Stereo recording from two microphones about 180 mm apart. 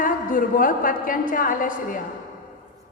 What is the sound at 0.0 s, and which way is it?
A woman's voice, 50° left (ahead or behind).